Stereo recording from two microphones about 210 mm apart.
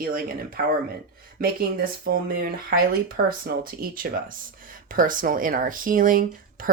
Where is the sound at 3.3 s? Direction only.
45° right (ahead or behind).